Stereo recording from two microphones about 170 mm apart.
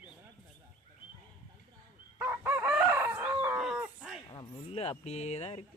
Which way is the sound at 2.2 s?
10° right (ahead or behind).